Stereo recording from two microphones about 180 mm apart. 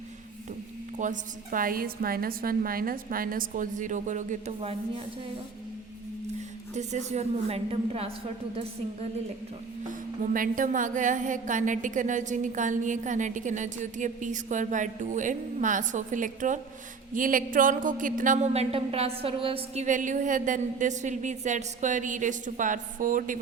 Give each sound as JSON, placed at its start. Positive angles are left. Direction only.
{"t": 0.9, "sound": "a woman's voice", "side_deg": -45}
{"t": 6.7, "sound": "a woman's voice", "side_deg": -40}
{"t": 10.3, "sound": "a woman's voice", "side_deg": -50}